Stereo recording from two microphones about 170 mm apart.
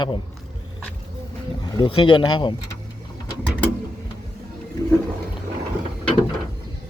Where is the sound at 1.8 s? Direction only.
25° left (ahead or behind).